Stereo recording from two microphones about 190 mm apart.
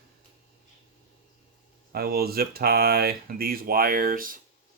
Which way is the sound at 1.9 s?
55° right (ahead or behind).